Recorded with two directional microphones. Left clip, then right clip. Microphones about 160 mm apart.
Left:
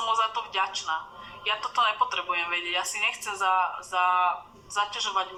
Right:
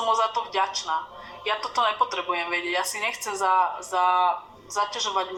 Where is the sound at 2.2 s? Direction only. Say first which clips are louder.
Right 2 dB; 15° right (ahead or behind).